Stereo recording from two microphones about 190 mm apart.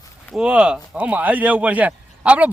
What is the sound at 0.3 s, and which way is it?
Speech, 5° right (ahead or behind).